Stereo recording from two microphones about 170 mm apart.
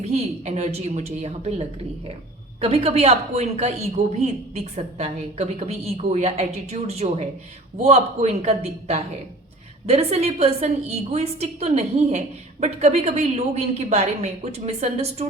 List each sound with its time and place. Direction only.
0.0 s a woman's voice: 40° right (ahead or behind)